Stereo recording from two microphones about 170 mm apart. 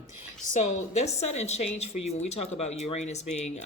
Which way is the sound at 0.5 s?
40° left (ahead or behind).